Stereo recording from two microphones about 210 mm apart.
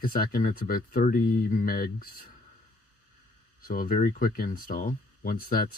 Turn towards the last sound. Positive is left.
turn(degrees=45)  # may be behind; listen again after turning